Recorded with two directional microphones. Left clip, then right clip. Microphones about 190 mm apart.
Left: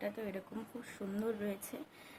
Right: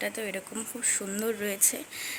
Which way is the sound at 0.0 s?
15° right (ahead or behind).